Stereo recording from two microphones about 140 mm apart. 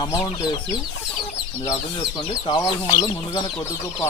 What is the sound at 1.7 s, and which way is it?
Speech, 30° left (ahead or behind).